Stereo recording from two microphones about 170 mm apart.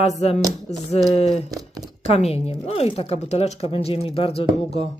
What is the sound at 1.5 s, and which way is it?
Speech, 20° right (ahead or behind).